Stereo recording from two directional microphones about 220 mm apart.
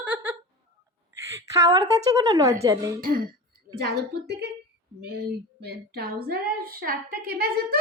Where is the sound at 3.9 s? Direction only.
45° right (ahead or behind).